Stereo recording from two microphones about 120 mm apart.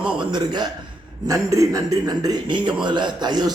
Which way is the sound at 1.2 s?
25° right (ahead or behind).